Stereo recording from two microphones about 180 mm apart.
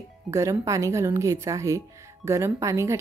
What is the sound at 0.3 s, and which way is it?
A woman's voice, 15° right (ahead or behind).